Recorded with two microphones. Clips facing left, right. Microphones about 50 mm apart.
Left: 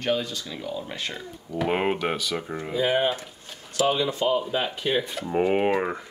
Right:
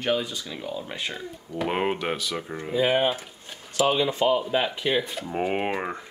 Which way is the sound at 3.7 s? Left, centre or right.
Centre.